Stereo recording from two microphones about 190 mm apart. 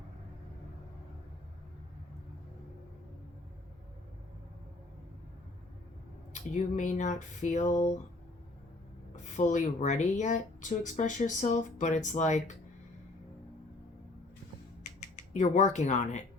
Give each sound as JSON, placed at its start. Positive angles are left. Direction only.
{"t": 6.3, "sound": "speech", "side_deg": 40}
{"t": 9.3, "sound": "speech", "side_deg": 40}
{"t": 15.3, "sound": "speech", "side_deg": 40}